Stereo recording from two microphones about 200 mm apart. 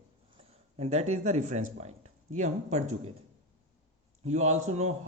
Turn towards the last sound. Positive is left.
turn(degrees=-35)  # may be behind; listen again after turning